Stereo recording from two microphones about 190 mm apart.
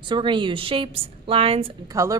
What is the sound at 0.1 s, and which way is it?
A woman's voice, 25° right (ahead or behind).